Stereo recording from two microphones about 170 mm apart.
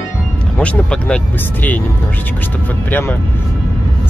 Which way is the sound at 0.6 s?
5° left (ahead or behind).